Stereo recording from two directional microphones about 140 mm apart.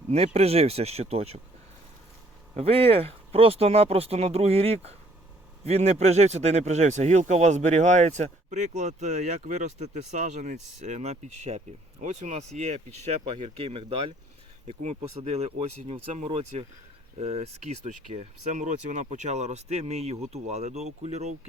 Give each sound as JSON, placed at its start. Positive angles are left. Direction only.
{"t": 0.3, "sound": "speech", "side_deg": -45}
{"t": 2.6, "sound": "speech", "side_deg": -45}
{"t": 13.4, "sound": "speech", "side_deg": -40}
{"t": 14.7, "sound": "speech", "side_deg": -50}